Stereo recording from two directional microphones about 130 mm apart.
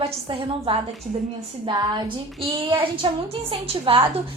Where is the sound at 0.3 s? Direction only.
40° right (ahead or behind).